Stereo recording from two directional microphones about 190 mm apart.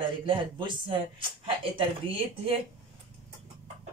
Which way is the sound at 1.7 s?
30° right (ahead or behind).